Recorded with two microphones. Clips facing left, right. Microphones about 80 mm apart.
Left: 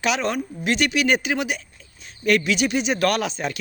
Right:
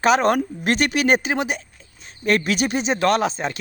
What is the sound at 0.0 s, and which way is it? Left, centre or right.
Speech, right.